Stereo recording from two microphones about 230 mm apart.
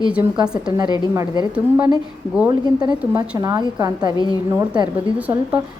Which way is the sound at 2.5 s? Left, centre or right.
Centre.